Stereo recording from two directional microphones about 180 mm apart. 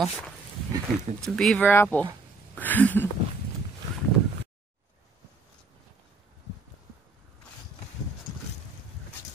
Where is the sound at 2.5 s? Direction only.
10° left (ahead or behind).